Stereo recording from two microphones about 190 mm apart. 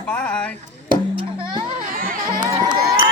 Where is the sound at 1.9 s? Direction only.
45° right (ahead or behind).